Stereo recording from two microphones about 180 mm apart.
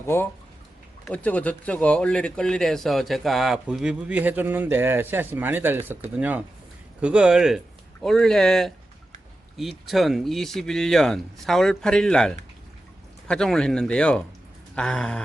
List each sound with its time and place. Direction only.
0.0 s speech: 15° left (ahead or behind)